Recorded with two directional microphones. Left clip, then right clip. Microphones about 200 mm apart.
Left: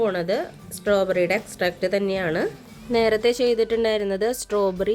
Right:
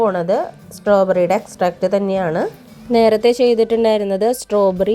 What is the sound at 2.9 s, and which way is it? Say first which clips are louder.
Speech: right 7 dB; 20° right (ahead or behind).